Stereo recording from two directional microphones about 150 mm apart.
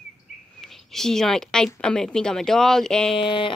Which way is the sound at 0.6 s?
Centre (ahead or behind).